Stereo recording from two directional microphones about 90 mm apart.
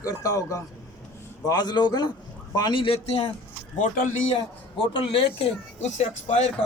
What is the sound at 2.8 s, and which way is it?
Speech, 90° left.